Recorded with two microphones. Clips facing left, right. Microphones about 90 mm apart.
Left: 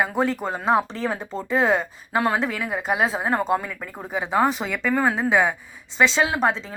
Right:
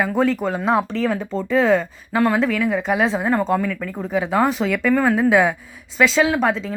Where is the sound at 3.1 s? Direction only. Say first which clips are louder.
Right 4 dB; 35° left (ahead or behind).